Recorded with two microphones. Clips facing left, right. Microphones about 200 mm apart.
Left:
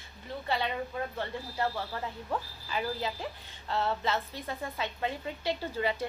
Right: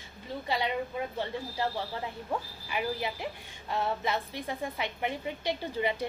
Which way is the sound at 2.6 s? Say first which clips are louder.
Right 1 dB; 15° right (ahead or behind).